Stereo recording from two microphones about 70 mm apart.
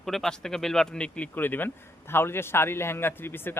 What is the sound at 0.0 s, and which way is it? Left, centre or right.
Speech, centre.